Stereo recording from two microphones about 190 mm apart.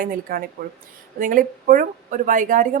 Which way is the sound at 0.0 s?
50° right (ahead or behind).